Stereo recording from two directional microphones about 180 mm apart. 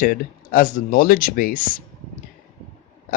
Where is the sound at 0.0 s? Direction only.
50° left (ahead or behind).